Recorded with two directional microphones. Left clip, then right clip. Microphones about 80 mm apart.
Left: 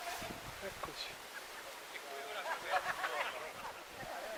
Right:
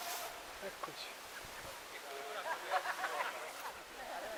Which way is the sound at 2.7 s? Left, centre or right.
Left.